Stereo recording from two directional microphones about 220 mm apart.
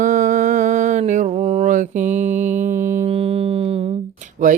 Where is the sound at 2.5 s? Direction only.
35° right (ahead or behind).